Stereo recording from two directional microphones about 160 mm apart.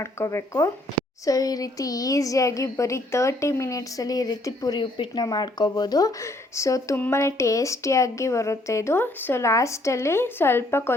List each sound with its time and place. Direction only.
0.0 s a woman's voice: 20° left (ahead or behind)